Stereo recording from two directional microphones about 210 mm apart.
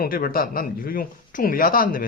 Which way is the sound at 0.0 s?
45° left (ahead or behind).